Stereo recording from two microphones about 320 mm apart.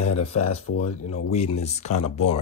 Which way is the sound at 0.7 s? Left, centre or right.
Left.